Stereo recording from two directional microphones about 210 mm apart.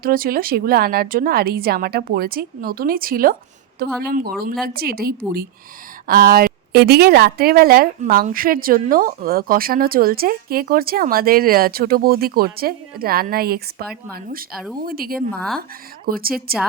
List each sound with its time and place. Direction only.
0.0 s a woman's voice: 45° right (ahead or behind)
15.3 s speech: 5° left (ahead or behind)
16.0 s a woman's voice: 45° right (ahead or behind)